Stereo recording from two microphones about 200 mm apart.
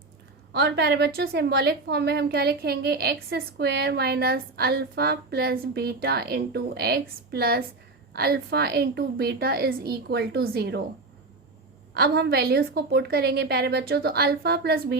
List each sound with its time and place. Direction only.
0.5 s a woman's voice: 55° right (ahead or behind)
11.9 s a woman's voice: 55° right (ahead or behind)